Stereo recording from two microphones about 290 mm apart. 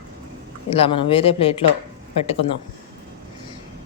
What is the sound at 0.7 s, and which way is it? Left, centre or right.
Speech, centre.